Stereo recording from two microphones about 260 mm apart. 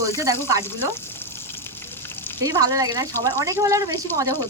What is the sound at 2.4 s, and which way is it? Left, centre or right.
Speech, centre.